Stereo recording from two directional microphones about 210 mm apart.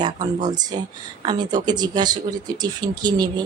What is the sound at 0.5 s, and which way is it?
Speech, 20° right (ahead or behind).